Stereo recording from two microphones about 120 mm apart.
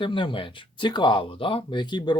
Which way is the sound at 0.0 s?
45° left (ahead or behind).